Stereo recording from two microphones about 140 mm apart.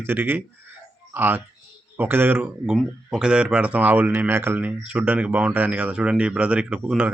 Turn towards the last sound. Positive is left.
turn(degrees=-5)  # may be behind; listen again after turning